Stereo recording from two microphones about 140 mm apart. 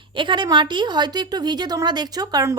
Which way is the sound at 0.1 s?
35° right (ahead or behind).